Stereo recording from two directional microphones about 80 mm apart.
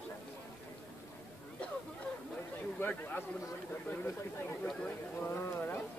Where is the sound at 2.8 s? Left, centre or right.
Left.